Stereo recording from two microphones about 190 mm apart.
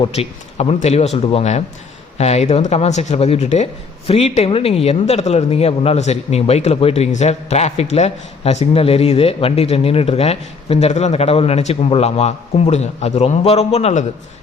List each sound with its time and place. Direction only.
0.0 s speech: 35° left (ahead or behind)